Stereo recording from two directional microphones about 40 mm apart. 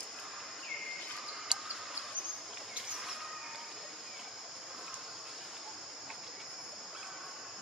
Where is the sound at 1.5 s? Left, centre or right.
Centre.